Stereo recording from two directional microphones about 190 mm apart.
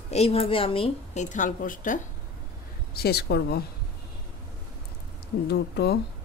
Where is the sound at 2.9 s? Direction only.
55° left (ahead or behind).